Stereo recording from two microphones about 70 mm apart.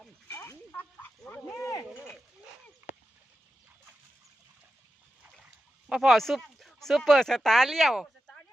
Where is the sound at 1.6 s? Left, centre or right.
Left.